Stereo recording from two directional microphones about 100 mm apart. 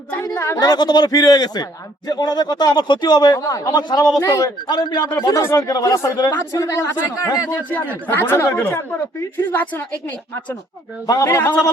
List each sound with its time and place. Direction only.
0.1 s speech: 25° left (ahead or behind)
5.4 s speech: 30° left (ahead or behind)
8.0 s speech: 20° left (ahead or behind)
11.0 s speech: 35° left (ahead or behind)